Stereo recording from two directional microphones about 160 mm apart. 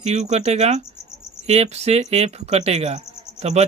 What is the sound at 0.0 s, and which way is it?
Speech, 45° right (ahead or behind).